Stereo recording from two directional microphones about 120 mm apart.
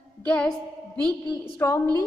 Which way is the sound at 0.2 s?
10° left (ahead or behind).